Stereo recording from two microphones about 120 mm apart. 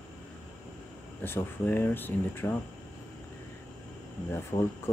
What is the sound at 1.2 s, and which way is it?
Speech, 20° left (ahead or behind).